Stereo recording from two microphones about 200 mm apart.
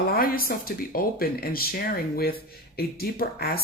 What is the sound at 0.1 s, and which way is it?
Speech, 45° left (ahead or behind).